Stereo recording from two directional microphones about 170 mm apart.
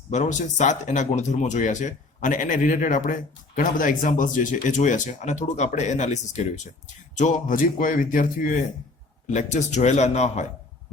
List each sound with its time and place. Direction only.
0.1 s speech: 45° left (ahead or behind)